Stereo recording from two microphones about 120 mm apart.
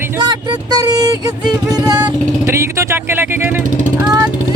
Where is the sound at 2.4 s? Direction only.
25° right (ahead or behind).